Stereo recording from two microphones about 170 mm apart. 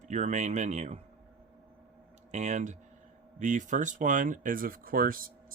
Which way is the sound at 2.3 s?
45° right (ahead or behind).